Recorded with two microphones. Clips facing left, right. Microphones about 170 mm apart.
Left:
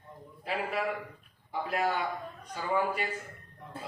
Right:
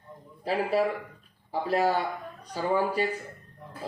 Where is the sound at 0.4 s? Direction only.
35° right (ahead or behind).